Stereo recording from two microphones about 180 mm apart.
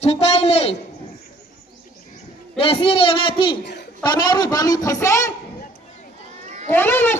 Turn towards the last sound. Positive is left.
turn(degrees=10)  # may be behind; listen again after turning